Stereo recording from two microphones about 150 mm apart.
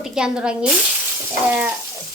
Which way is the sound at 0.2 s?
5° right (ahead or behind).